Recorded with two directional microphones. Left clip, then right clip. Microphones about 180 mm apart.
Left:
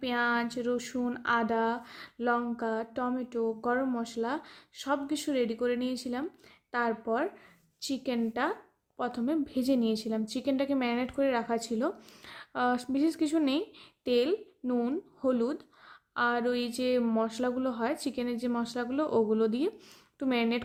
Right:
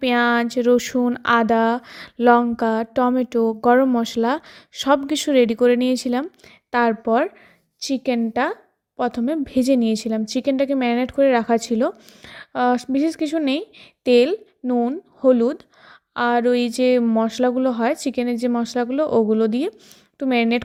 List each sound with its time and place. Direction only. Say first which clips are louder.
0.0 s speech: right 11 dB; 45° right (ahead or behind)